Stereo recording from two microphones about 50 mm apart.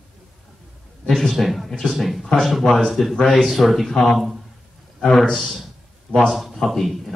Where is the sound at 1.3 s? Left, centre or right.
Centre.